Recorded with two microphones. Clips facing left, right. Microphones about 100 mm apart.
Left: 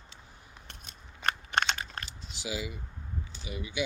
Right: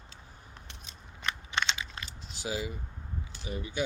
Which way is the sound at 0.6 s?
50° left (ahead or behind).